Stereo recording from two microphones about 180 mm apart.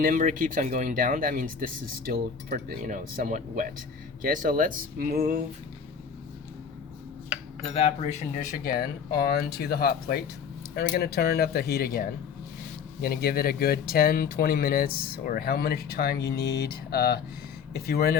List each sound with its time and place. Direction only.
0.0 s speech: 50° right (ahead or behind)
7.3 s cutlery: 5° right (ahead or behind)
7.7 s speech: 35° left (ahead or behind); by 18.2 s 60° left (ahead or behind)